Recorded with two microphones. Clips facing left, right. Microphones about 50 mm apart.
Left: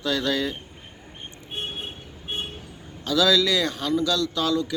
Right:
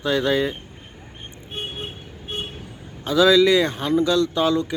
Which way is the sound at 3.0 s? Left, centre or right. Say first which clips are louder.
Right 5 dB; right.